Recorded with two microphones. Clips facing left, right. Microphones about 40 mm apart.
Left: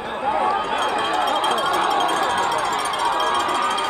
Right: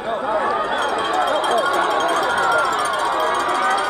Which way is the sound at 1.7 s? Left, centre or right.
Right.